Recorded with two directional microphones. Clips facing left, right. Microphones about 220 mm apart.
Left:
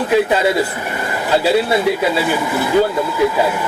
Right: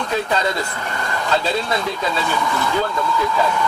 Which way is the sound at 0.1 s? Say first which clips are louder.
Left 7 dB; 10° left (ahead or behind).